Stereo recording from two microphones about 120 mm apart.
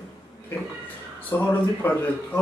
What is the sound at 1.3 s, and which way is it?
Speech, 15° left (ahead or behind).